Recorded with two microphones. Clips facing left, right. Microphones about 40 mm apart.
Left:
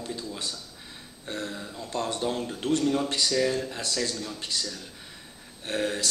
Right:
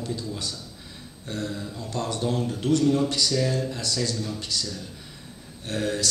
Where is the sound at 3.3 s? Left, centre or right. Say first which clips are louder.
Even; centre.